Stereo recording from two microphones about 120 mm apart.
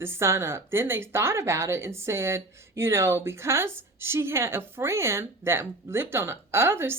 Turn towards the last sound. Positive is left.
turn(degrees=-20)  # may be behind; listen again after turning